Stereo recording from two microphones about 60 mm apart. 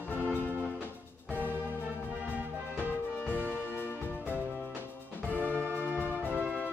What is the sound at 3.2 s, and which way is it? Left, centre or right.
Music, left.